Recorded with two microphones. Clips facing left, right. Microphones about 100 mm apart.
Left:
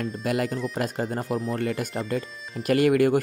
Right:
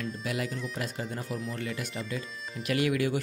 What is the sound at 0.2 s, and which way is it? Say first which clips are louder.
Speech: left 10 dB; 50° left (ahead or behind).